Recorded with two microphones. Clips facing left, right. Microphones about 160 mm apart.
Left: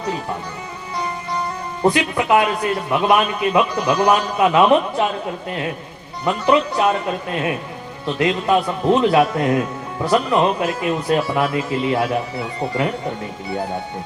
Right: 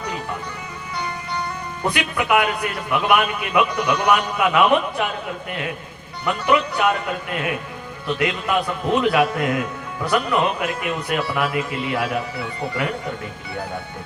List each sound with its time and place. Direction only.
1.8 s a man's voice: 30° left (ahead or behind)